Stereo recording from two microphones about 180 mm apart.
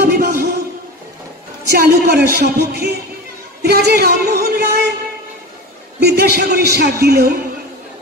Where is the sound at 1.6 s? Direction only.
60° right (ahead or behind).